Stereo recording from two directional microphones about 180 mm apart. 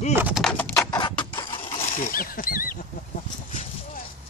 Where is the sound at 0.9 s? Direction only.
25° left (ahead or behind).